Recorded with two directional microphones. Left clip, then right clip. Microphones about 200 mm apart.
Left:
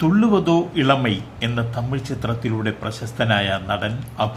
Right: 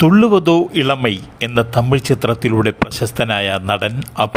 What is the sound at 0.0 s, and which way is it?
A man's voice, 50° right (ahead or behind).